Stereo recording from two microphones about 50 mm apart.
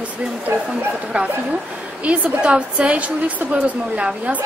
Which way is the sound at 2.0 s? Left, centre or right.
Right.